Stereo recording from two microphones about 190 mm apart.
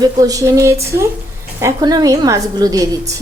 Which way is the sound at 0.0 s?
20° right (ahead or behind).